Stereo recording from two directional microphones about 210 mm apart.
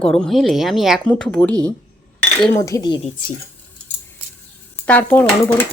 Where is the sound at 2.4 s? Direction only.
15° left (ahead or behind).